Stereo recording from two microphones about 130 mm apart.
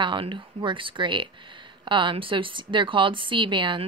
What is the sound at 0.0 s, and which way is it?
Speech, 40° right (ahead or behind).